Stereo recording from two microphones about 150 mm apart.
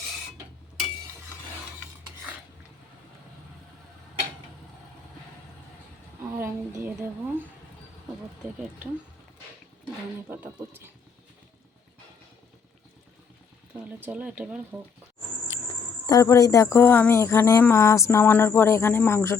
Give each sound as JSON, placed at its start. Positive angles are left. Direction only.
{"t": 6.3, "sound": "a woman's voice", "side_deg": -15}
{"t": 10.2, "sound": "speech", "side_deg": -15}
{"t": 14.0, "sound": "speech", "side_deg": -10}
{"t": 16.0, "sound": "insect", "side_deg": 20}